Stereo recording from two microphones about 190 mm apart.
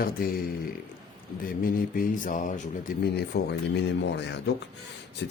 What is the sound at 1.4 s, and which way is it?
Speech, 50° left (ahead or behind).